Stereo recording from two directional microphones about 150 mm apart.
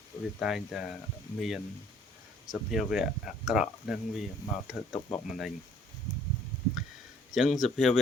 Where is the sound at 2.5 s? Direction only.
5° right (ahead or behind).